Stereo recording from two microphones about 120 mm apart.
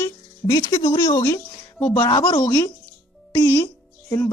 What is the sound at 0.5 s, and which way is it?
Speech, 25° left (ahead or behind).